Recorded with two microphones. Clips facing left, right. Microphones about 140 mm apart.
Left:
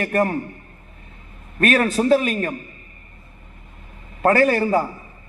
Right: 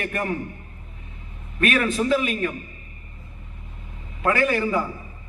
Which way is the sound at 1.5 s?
45° left (ahead or behind).